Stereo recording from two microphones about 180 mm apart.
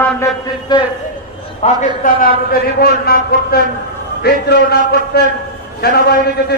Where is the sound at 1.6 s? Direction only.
45° left (ahead or behind).